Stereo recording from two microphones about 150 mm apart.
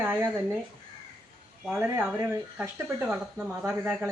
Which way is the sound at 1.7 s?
15° right (ahead or behind).